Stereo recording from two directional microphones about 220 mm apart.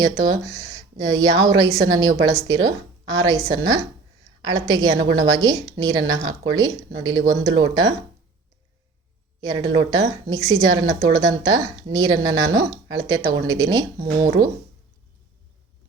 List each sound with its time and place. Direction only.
0.0 s a woman's voice: 15° right (ahead or behind)
9.4 s a woman's voice: 15° right (ahead or behind)